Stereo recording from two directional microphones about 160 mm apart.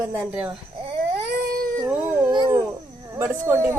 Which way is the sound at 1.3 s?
70° right (ahead or behind).